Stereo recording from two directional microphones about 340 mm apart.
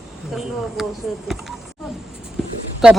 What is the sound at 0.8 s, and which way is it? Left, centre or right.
Speech, centre.